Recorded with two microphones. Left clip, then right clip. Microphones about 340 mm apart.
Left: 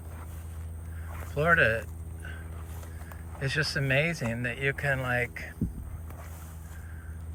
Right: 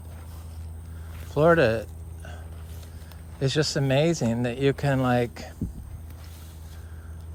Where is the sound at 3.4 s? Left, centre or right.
Centre.